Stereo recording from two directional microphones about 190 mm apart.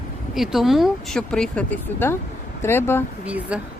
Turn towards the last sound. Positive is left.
turn(degrees=-5)  # may be behind; listen again after turning